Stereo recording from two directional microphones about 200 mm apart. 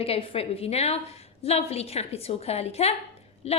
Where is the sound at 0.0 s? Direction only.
30° left (ahead or behind).